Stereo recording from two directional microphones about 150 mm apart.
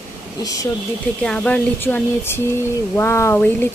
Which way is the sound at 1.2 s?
5° left (ahead or behind).